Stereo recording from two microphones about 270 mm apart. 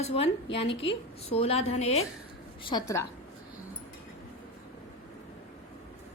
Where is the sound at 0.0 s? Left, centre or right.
Left.